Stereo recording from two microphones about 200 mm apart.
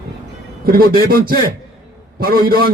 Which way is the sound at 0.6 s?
45° right (ahead or behind).